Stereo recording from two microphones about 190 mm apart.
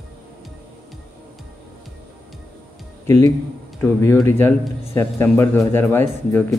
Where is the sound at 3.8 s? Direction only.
15° left (ahead or behind).